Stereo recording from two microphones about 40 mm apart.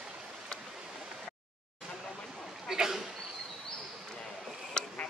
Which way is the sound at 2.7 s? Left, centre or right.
Centre.